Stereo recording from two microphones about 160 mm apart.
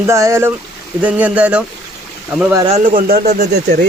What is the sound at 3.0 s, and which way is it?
Speech, 65° right (ahead or behind).